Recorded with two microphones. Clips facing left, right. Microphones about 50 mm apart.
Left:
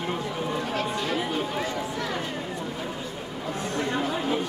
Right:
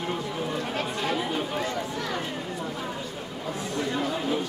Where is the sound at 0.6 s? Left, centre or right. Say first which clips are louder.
Left 1 dB; centre.